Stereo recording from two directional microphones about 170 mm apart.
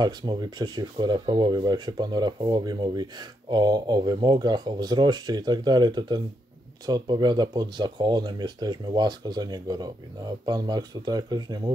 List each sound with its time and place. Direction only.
0.0 s speech: 25° right (ahead or behind)